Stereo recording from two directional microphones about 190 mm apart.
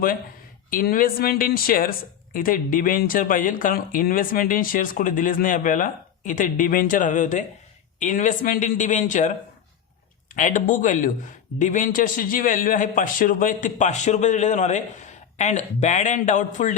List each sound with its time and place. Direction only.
0.7 s a man's voice: 45° left (ahead or behind)
10.3 s a man's voice: 40° left (ahead or behind)